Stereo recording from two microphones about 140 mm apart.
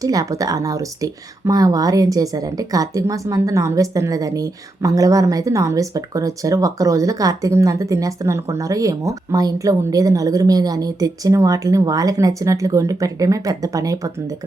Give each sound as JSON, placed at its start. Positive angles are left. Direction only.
{"t": 0.0, "sound": "speech", "side_deg": -25}